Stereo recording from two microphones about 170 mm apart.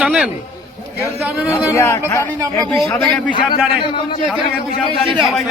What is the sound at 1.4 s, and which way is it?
Speech, 15° left (ahead or behind).